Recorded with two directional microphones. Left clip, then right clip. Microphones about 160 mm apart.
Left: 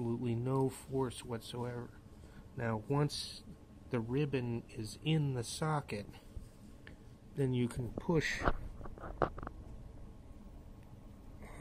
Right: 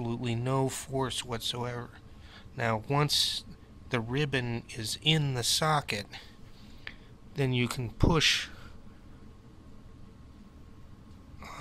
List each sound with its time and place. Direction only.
0.0 s a man's voice: 10° right (ahead or behind)